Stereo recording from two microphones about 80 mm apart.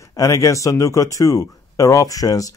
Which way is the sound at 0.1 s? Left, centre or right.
Left.